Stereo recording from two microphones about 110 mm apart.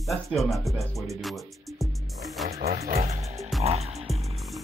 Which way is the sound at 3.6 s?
70° right (ahead or behind).